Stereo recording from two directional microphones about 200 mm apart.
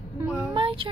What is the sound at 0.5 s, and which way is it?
Child singing, 25° right (ahead or behind).